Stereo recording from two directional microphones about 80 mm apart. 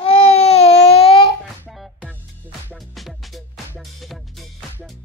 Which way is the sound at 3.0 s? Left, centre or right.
Centre.